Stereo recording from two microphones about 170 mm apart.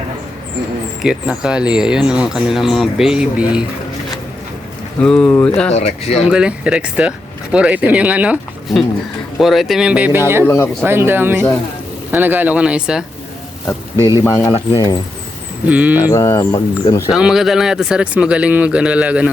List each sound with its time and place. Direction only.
1.0 s speech: 5° right (ahead or behind)
4.9 s speech: 5° left (ahead or behind)
5.7 s speech: 35° left (ahead or behind)
6.2 s speech: 5° right (ahead or behind)
10.4 s speech: 15° left (ahead or behind)
10.8 s speech: 15° right (ahead or behind)
13.9 s speech: 20° right (ahead or behind)
14.3 s speech: 15° left (ahead or behind)
15.6 s speech: 10° right (ahead or behind)
16.1 s speech: 15° left (ahead or behind)
17.1 s speech: 5° right (ahead or behind)